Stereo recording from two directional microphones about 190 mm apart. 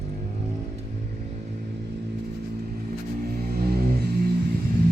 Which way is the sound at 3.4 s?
55° right (ahead or behind).